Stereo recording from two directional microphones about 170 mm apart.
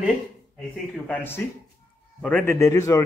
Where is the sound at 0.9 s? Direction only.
10° left (ahead or behind).